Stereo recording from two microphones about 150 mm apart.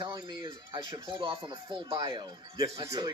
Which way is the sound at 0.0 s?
30° right (ahead or behind).